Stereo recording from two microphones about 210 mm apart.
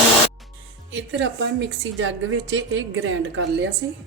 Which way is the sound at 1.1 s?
60° right (ahead or behind).